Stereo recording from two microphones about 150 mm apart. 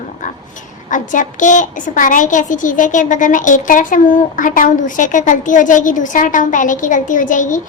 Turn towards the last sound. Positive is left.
turn(degrees=60)  # may be behind; listen again after turning